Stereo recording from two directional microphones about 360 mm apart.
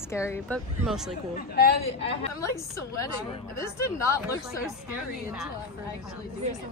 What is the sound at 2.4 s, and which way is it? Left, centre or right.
A woman's voice, centre.